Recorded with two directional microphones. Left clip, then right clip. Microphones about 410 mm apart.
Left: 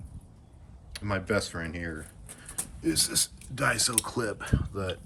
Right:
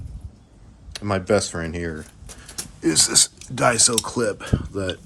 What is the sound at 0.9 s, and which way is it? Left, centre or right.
Speech, centre.